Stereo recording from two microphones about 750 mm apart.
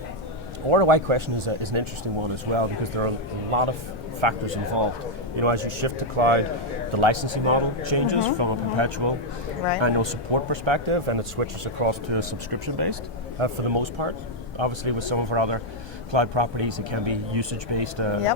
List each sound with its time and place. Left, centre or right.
0.7 s a man's voice: right